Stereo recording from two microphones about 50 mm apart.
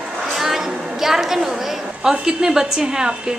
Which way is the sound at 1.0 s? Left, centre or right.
Centre.